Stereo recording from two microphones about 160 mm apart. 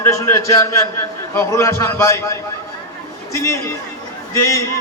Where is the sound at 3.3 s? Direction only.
20° left (ahead or behind).